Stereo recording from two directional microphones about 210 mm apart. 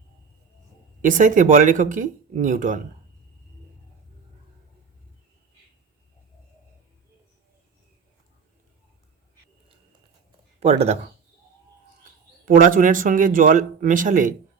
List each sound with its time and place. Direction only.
1.0 s speech: 40° right (ahead or behind)
10.6 s speech: 30° right (ahead or behind)
12.0 s speech: 40° right (ahead or behind)